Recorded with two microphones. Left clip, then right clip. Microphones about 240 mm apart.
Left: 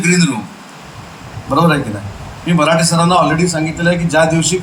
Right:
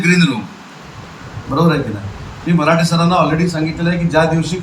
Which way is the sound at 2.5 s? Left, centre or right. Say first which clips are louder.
Left 2 dB; left.